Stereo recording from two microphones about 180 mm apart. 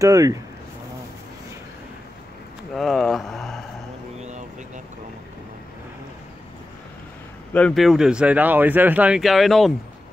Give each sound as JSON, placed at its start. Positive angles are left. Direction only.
{"t": 0.0, "sound": "speech", "side_deg": -20}
{"t": 2.7, "sound": "a sound", "side_deg": 0}
{"t": 7.5, "sound": "speech", "side_deg": 5}